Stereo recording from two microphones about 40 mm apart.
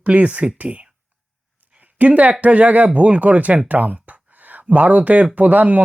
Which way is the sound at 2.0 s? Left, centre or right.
Right.